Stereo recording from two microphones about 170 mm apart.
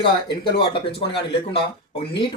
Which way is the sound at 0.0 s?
30° left (ahead or behind).